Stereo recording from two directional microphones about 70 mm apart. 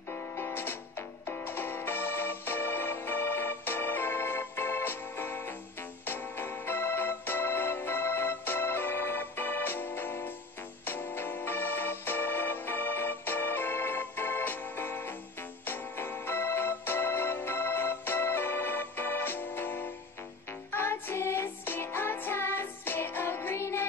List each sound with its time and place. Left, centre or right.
0.1 s music: left
6.0 s organ: left
10.9 s music: left